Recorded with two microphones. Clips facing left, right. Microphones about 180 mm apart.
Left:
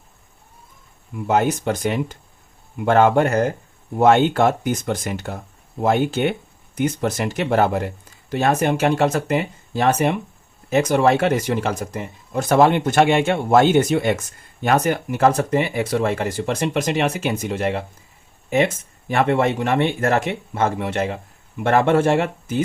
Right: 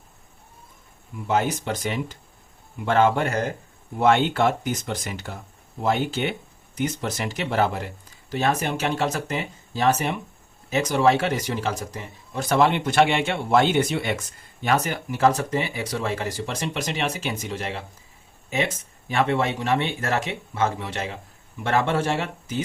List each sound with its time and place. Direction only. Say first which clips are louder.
1.3 s speech: left 5 dB; 50° left (ahead or behind)